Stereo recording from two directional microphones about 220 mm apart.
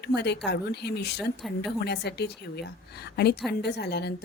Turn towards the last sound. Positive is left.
turn(degrees=50)  # may be behind; listen again after turning